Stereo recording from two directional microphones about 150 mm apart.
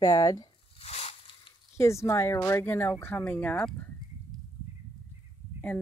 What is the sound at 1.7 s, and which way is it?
Speech, 20° left (ahead or behind).